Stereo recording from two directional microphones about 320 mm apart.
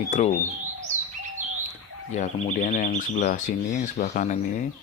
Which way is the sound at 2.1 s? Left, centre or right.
Left.